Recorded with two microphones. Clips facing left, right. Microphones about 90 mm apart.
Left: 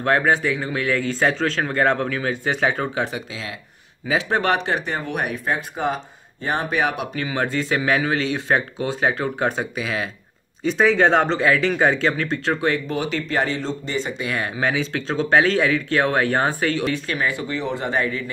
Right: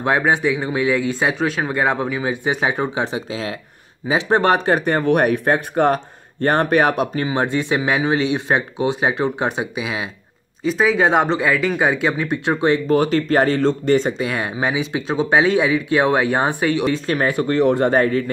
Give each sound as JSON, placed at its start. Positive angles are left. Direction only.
{"t": 0.0, "sound": "speech", "side_deg": -15}
{"t": 3.3, "sound": "speech", "side_deg": -40}
{"t": 4.9, "sound": "speech", "side_deg": -60}
{"t": 7.2, "sound": "speech", "side_deg": -20}
{"t": 10.6, "sound": "speech", "side_deg": -5}
{"t": 12.8, "sound": "speech", "side_deg": -45}
{"t": 14.1, "sound": "speech", "side_deg": -25}
{"t": 16.9, "sound": "speech", "side_deg": -40}